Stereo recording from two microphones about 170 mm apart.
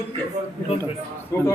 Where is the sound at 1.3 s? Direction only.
15° left (ahead or behind).